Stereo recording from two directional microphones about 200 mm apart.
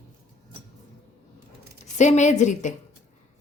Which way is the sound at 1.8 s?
35° left (ahead or behind).